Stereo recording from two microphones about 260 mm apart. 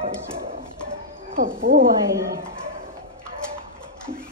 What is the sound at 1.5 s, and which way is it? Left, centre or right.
Speech, right.